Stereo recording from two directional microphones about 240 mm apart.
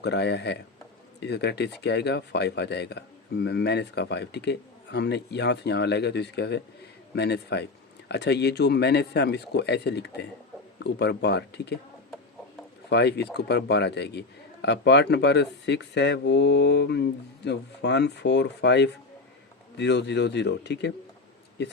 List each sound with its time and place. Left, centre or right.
0.0 s a man's voice: left
12.9 s a man's voice: left